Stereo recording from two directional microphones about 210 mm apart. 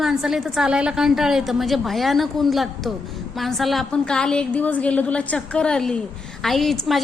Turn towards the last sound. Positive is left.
turn(degrees=0)  # may be behind; listen again after turning